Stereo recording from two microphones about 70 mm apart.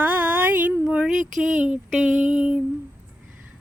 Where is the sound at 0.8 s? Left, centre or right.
Centre.